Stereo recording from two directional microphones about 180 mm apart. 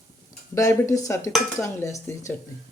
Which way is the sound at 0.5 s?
15° left (ahead or behind).